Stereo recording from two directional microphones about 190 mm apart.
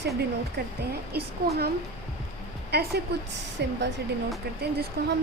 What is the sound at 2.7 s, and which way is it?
A woman's voice, 55° right (ahead or behind).